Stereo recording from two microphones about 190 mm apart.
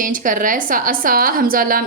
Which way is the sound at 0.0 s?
45° right (ahead or behind).